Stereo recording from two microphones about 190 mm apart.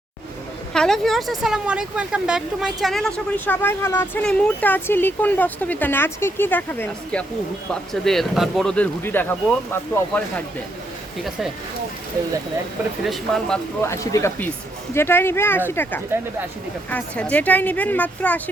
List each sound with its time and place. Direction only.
0.7 s speech: 5° left (ahead or behind)
13.1 s speech: centre (ahead or behind)
13.8 s speech: 15° left (ahead or behind)